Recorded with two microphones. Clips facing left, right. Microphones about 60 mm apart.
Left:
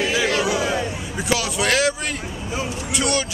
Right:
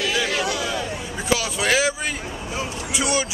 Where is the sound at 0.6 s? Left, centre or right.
Left.